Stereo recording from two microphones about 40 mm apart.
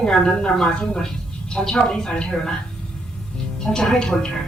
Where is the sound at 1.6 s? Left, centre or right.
Centre.